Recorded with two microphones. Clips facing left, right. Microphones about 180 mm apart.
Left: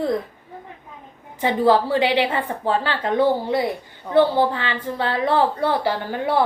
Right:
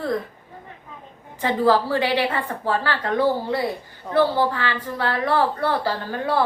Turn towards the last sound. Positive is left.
turn(degrees=20)  # may be behind; listen again after turning